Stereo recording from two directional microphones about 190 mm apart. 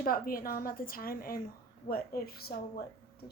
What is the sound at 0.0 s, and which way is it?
A woman's voice, 50° left (ahead or behind).